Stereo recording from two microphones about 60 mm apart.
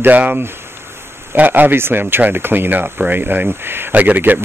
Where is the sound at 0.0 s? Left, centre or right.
Right.